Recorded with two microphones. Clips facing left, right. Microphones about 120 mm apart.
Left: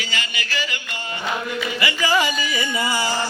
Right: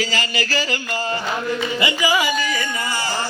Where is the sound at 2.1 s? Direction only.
5° right (ahead or behind).